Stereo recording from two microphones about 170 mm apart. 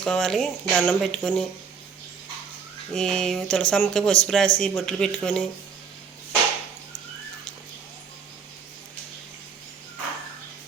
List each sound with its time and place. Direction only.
0.0 s speech: 5° left (ahead or behind)
2.9 s speech: 5° left (ahead or behind)